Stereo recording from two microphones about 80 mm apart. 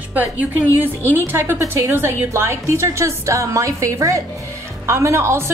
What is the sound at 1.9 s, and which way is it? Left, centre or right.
A woman's voice, right.